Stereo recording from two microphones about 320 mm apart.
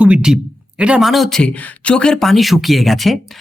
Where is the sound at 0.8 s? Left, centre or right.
Centre.